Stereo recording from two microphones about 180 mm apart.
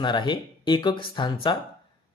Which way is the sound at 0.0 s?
25° left (ahead or behind).